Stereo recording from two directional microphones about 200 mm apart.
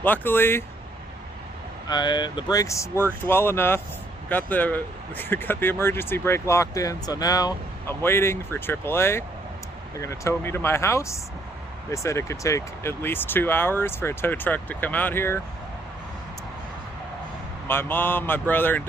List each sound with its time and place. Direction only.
0.0 s speech: 10° left (ahead or behind)
1.9 s speech: 20° left (ahead or behind)
17.7 s speech: 10° left (ahead or behind)